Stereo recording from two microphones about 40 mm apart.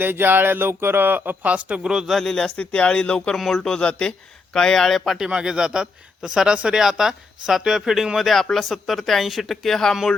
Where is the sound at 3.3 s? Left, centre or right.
Centre.